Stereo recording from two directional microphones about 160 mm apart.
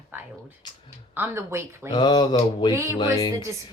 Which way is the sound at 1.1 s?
15° right (ahead or behind).